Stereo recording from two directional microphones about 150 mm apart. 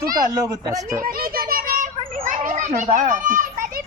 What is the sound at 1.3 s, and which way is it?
Children playing, 70° right (ahead or behind).